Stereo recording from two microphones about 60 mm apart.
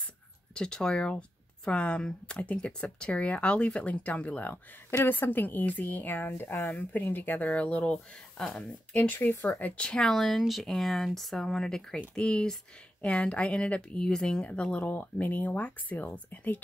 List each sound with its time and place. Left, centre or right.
0.6 s speech: centre
8.9 s speech: left
9.8 s speech: centre
10.1 s speech: centre; by 16.6 s left